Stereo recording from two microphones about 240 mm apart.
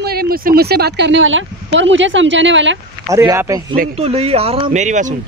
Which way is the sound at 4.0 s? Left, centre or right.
Right.